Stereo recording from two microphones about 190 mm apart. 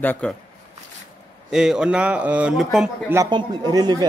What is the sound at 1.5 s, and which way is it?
Speech, 5° right (ahead or behind).